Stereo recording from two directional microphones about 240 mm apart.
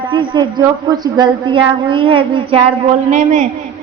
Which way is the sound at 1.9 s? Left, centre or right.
Right.